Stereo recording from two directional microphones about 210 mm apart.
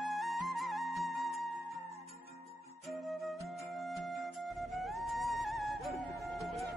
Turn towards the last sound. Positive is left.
turn(degrees=0)  # may be behind; listen again after turning